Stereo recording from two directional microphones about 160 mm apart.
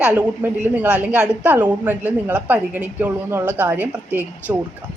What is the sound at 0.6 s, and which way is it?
A woman's voice, 10° right (ahead or behind).